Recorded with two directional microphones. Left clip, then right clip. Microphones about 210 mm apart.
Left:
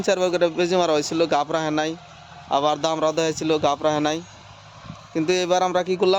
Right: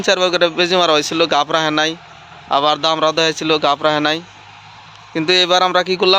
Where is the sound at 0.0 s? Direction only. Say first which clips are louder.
Right 6 dB; centre (ahead or behind).